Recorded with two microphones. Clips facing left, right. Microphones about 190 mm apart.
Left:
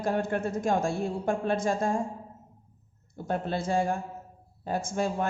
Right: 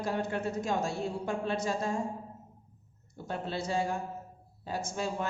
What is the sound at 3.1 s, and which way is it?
A man's voice, 50° left (ahead or behind).